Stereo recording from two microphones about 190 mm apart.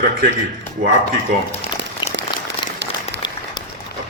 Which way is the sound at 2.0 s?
25° left (ahead or behind).